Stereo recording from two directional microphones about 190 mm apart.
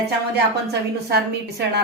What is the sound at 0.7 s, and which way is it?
A woman's voice, 60° right (ahead or behind).